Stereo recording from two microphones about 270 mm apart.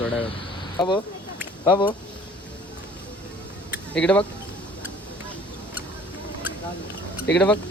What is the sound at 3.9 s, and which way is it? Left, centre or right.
Speech, centre.